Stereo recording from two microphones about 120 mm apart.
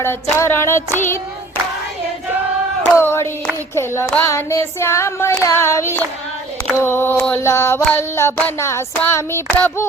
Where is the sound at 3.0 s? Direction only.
20° left (ahead or behind).